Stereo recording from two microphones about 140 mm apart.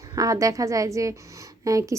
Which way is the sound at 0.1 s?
25° right (ahead or behind).